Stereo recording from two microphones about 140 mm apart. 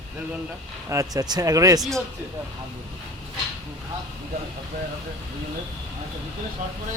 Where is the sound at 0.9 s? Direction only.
25° right (ahead or behind).